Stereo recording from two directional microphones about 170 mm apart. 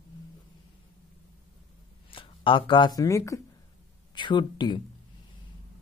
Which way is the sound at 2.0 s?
30° left (ahead or behind).